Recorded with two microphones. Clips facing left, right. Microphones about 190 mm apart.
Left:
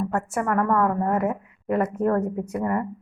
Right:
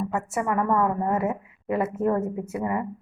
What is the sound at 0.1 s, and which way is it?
A woman's voice, centre (ahead or behind).